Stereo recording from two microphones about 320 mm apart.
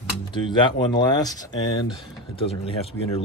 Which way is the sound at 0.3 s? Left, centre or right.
Centre.